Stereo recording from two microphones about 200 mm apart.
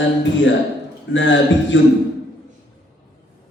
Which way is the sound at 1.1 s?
65° left (ahead or behind).